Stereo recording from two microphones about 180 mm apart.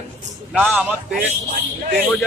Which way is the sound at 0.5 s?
10° right (ahead or behind).